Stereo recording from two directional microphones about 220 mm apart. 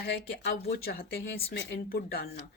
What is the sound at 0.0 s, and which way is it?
Speech, 45° left (ahead or behind).